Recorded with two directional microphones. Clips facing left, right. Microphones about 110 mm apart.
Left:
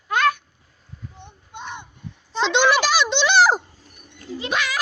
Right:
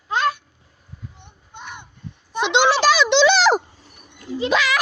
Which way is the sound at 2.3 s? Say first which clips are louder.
Right 1 dB; 15° right (ahead or behind).